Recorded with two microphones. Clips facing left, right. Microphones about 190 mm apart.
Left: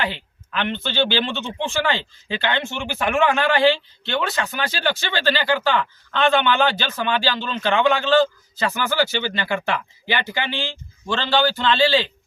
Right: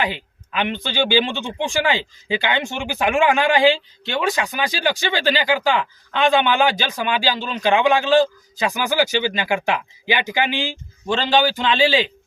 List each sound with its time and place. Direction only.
0.0 s speech: 15° right (ahead or behind)